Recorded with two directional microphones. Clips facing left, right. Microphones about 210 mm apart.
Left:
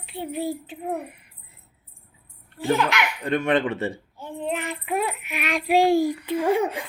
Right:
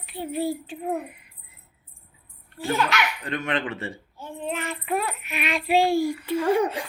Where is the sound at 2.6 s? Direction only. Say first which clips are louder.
Left 2 dB; 20° left (ahead or behind).